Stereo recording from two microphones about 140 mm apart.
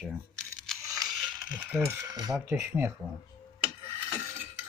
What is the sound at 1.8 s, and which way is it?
Speech, 20° right (ahead or behind).